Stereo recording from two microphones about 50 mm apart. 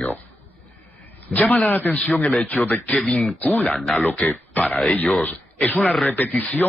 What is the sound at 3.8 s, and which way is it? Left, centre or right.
Speech, left.